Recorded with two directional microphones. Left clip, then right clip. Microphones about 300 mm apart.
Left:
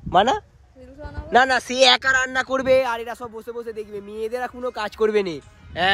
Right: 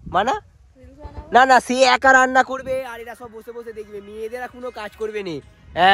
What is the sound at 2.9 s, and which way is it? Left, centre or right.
Speech, centre.